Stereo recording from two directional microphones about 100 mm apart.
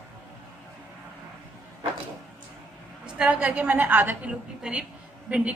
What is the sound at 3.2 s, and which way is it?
A woman's voice, 10° right (ahead or behind).